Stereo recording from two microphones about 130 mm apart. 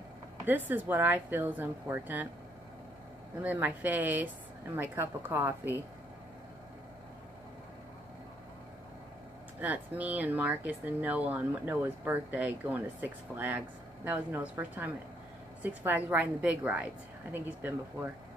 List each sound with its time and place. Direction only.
0.5 s speech: 15° right (ahead or behind)
3.4 s speech: 15° right (ahead or behind)
9.6 s speech: 10° right (ahead or behind)